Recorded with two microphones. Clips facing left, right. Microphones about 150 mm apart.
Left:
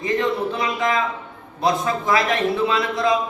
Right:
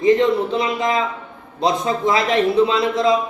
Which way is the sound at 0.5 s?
25° right (ahead or behind).